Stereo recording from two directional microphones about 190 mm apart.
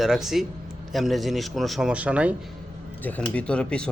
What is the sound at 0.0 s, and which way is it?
A man's voice, centre (ahead or behind).